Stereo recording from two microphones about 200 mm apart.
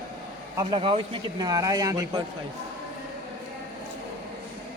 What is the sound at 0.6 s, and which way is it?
Speech, 25° right (ahead or behind).